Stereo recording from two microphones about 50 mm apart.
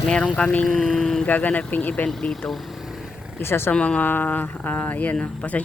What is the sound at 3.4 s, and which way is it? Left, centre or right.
Speech, left.